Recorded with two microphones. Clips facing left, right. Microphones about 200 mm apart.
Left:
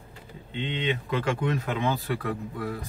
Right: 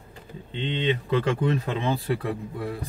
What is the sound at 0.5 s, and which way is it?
Speech, 30° right (ahead or behind).